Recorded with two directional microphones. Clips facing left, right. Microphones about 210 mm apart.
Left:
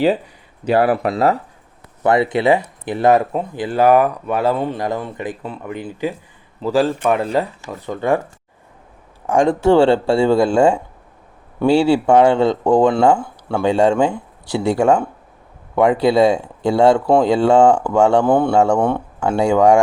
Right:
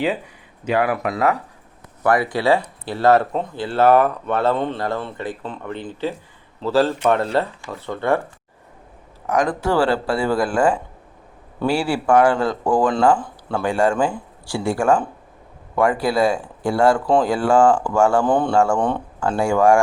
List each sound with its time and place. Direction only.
0.6 s speech: 35° left (ahead or behind); by 8.2 s 15° left (ahead or behind)
9.2 s speech: 30° left (ahead or behind)
18.3 s speech: 10° left (ahead or behind)
18.5 s speech: 20° left (ahead or behind)
18.8 s speech: 10° left (ahead or behind)
19.4 s speech: 20° left (ahead or behind)